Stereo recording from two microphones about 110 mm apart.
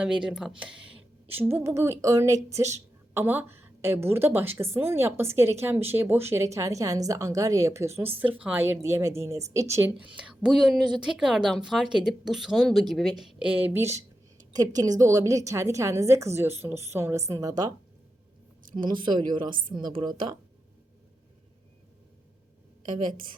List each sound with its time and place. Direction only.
0.0 s a woman's voice: 10° right (ahead or behind); by 9.9 s 25° right (ahead or behind)
10.4 s speech: 5° right (ahead or behind); by 14.0 s 20° right (ahead or behind)
14.5 s speech: 35° right (ahead or behind)
18.8 s a woman's voice: 45° right (ahead or behind)